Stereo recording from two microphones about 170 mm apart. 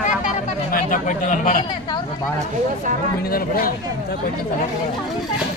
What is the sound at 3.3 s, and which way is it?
Speech, 60° left (ahead or behind).